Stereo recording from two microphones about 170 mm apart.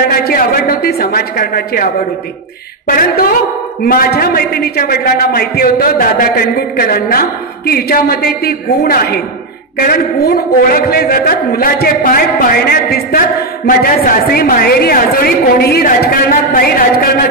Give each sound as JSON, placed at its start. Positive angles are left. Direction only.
{"t": 0.1, "sound": "a man's voice", "side_deg": 60}
{"t": 2.9, "sound": "a man's voice", "side_deg": 60}